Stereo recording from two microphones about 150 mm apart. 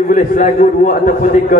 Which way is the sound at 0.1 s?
65° left (ahead or behind).